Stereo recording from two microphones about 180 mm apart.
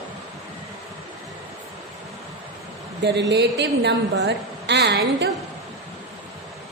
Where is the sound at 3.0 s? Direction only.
80° right.